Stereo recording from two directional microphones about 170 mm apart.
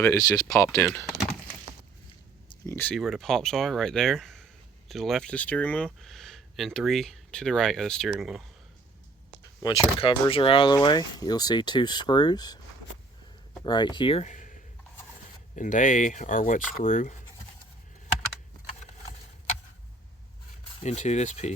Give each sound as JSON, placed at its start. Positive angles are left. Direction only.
{"t": 0.0, "sound": "speech", "side_deg": 20}
{"t": 2.7, "sound": "speech", "side_deg": 5}
{"t": 9.6, "sound": "speech", "side_deg": 30}
{"t": 13.7, "sound": "speech", "side_deg": 25}
{"t": 20.8, "sound": "speech", "side_deg": 40}